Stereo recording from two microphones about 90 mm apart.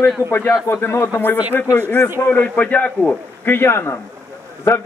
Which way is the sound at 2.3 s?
15° left (ahead or behind).